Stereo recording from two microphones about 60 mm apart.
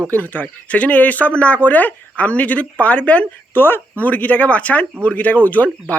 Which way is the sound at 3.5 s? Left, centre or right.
Left.